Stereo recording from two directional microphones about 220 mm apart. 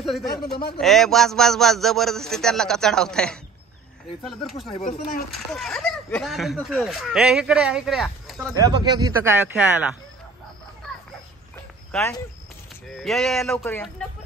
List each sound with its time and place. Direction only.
0.0 s speech: centre (ahead or behind)
8.5 s speech: 15° right (ahead or behind)
12.8 s speech: centre (ahead or behind)